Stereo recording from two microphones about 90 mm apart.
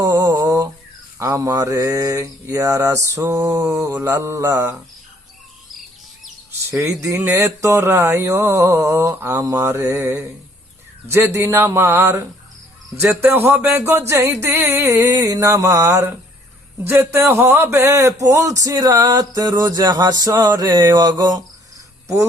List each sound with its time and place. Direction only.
0.0 s mantra: 45° right (ahead or behind)
1.2 s a man's voice: 35° right (ahead or behind)
7.2 s a man's voice: 30° right (ahead or behind)
13.2 s a man's voice: 30° right (ahead or behind); by 20.5 s 45° right (ahead or behind)
20.6 s mantra: 50° right (ahead or behind)
22.0 s cricket: 35° right (ahead or behind)